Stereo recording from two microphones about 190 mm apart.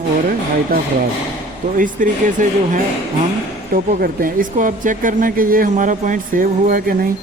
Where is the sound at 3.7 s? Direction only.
50° right (ahead or behind).